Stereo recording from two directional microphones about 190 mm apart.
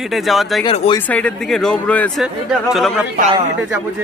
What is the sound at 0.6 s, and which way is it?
Speech, 30° left (ahead or behind).